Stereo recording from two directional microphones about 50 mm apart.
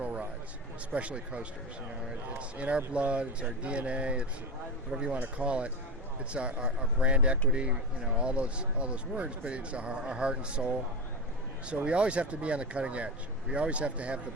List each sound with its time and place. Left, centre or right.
0.0 s a sound: right
0.9 s speech: right
11.9 s speech: right